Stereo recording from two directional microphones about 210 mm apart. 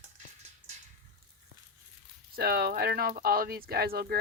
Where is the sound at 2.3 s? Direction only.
50° right (ahead or behind).